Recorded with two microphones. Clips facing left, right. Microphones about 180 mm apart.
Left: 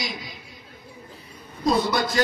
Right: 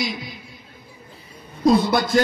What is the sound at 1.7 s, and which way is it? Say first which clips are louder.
Speech: right 4 dB; 55° right (ahead or behind).